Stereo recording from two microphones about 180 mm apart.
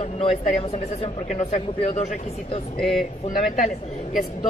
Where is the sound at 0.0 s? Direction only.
40° left (ahead or behind).